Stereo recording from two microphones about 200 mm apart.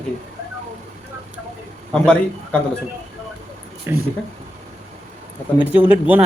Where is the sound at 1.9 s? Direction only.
5° left (ahead or behind).